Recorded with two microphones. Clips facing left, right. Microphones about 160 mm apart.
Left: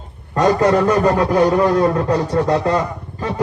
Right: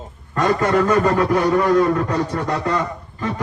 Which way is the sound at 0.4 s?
35° left (ahead or behind).